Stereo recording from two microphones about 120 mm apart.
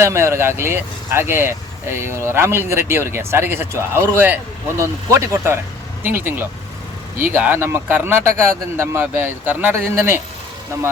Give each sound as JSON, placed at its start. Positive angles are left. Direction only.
{"t": 0.0, "sound": "speech", "side_deg": -25}